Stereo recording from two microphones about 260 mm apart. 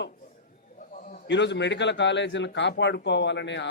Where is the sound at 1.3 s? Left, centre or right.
Left.